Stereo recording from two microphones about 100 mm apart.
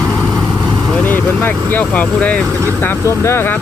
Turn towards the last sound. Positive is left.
turn(degrees=25)  # may be behind; listen again after turning